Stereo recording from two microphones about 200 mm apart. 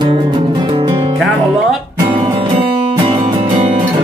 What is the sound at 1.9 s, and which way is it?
Music, 15° right (ahead or behind).